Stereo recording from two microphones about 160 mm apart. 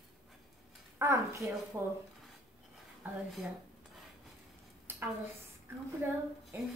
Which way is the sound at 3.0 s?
10° right (ahead or behind).